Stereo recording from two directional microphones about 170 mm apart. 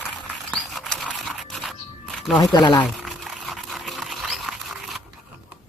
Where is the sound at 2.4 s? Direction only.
25° left (ahead or behind).